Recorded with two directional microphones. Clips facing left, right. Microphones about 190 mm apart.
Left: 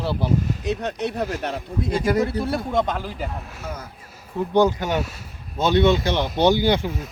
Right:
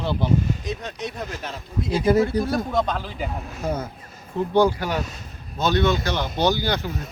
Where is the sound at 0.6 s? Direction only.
65° left (ahead or behind).